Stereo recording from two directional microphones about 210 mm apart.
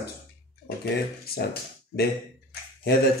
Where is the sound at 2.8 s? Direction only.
50° left (ahead or behind).